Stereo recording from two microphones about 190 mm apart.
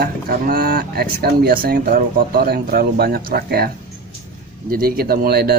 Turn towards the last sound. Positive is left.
turn(degrees=-55)  # may be behind; listen again after turning